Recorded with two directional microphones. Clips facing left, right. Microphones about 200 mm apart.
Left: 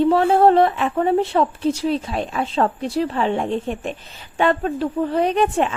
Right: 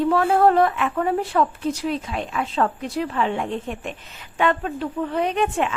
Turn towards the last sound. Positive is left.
turn(degrees=35)  # may be behind; listen again after turning